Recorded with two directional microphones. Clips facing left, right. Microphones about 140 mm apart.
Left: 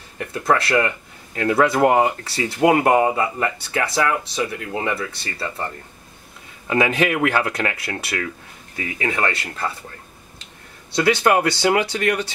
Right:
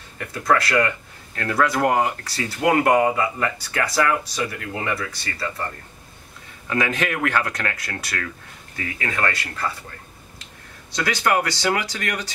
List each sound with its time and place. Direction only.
0.3 s speech: 25° left (ahead or behind)
6.7 s speech: 25° left (ahead or behind)